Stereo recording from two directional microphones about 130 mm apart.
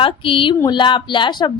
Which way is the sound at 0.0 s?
40° left (ahead or behind).